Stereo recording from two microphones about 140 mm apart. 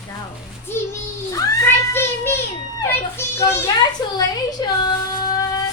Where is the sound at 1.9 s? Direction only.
15° left (ahead or behind).